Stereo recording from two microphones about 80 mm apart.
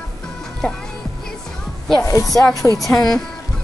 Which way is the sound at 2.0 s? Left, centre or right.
Left.